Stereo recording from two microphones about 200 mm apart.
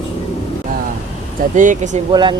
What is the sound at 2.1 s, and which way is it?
Speech, 25° right (ahead or behind).